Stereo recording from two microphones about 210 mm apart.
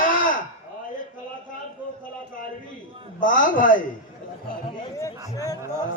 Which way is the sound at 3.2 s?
40° left (ahead or behind).